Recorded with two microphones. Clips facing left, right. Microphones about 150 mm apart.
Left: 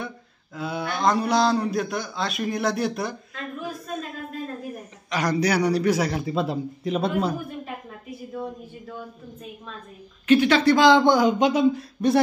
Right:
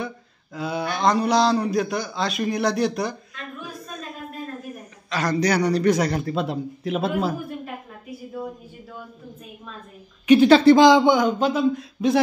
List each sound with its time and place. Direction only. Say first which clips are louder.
0.6 s a man's voice: right 2 dB; centre (ahead or behind)
5.1 s a man's voice: right 1 dB; 10° left (ahead or behind)
10.4 s speech: right 7 dB; 30° right (ahead or behind)
11.1 s a man's voice: even; centre (ahead or behind)